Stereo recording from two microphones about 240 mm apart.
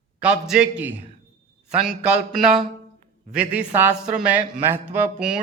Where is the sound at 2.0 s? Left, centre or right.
Centre.